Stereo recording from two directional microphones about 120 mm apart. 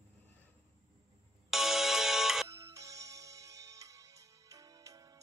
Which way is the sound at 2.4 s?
25° right (ahead or behind).